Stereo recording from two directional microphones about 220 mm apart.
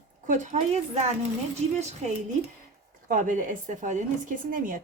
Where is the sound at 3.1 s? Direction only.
35° right (ahead or behind).